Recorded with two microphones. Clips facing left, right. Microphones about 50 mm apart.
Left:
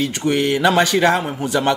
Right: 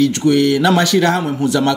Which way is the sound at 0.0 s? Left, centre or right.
Left.